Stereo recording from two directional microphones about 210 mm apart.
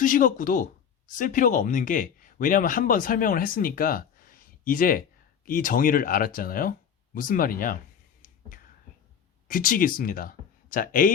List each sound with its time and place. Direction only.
0.0 s speech: 40° left (ahead or behind)
9.5 s speech: 40° left (ahead or behind)